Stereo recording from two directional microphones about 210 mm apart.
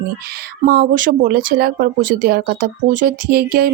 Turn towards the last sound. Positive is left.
turn(degrees=-50)  # may be behind; listen again after turning